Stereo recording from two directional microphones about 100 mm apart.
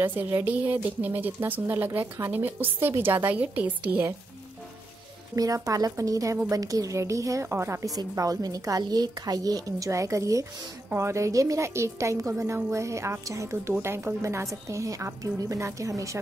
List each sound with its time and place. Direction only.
0.0 s speech: 20° right (ahead or behind)
5.3 s a woman's voice: 35° right (ahead or behind)